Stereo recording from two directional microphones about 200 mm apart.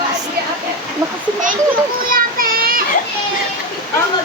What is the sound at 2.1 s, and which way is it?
Child singing, 45° right (ahead or behind).